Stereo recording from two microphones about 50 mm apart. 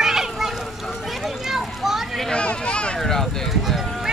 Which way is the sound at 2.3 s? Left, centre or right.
Left.